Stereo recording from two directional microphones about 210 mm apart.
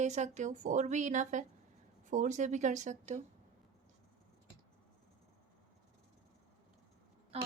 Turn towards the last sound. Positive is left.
turn(degrees=-30)  # may be behind; listen again after turning